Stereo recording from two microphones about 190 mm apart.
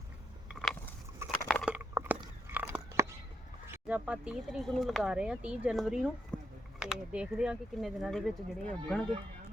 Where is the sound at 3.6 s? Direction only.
10° right (ahead or behind).